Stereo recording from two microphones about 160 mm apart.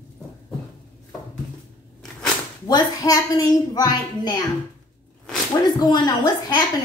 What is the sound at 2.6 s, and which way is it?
Speech, 20° left (ahead or behind).